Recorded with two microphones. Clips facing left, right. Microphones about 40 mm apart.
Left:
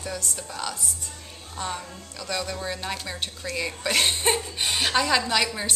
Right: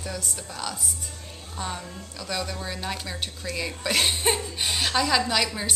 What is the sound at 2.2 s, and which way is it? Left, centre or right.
A woman's voice, centre.